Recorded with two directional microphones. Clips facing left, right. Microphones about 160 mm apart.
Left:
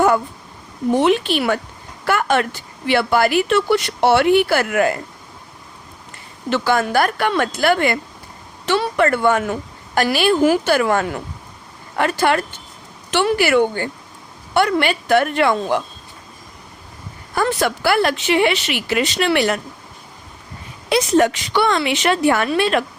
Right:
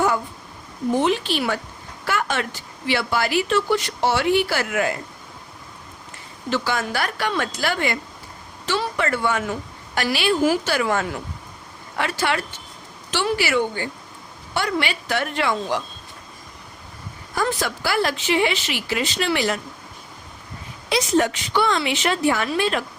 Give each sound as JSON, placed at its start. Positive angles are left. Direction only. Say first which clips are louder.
{"t": 0.9, "sound": "speech", "louder": "left 5 dB", "side_deg": 65}
{"t": 6.5, "sound": "a woman's voice", "louder": "left 6 dB", "side_deg": 55}
{"t": 17.3, "sound": "speech", "louder": "left 5 dB", "side_deg": 60}
{"t": 20.9, "sound": "speech", "louder": "left 5 dB", "side_deg": 65}